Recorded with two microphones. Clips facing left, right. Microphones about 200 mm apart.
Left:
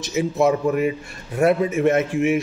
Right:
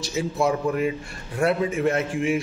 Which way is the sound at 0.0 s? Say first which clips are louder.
Left 5 dB; 20° left (ahead or behind).